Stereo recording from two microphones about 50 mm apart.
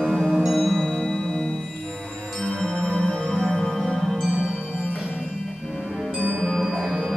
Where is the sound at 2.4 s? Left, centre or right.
Centre.